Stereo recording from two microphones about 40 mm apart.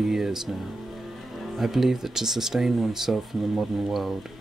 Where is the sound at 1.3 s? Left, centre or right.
Centre.